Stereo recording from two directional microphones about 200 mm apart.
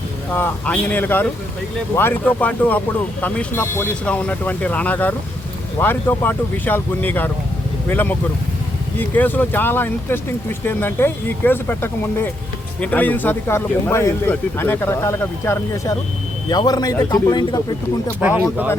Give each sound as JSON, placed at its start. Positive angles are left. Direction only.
{"t": 0.3, "sound": "speech", "side_deg": 10}
{"t": 18.2, "sound": "speech", "side_deg": -10}